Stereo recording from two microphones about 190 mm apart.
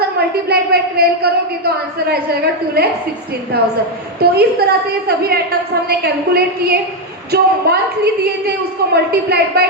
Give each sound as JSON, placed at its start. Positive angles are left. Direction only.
{"t": 0.2, "sound": "a woman's voice", "side_deg": -55}
{"t": 4.2, "sound": "a woman's voice", "side_deg": -55}